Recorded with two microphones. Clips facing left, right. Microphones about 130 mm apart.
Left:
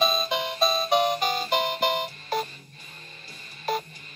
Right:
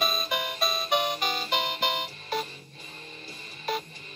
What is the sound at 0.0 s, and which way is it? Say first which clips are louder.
Music: left 4 dB; 25° left (ahead or behind).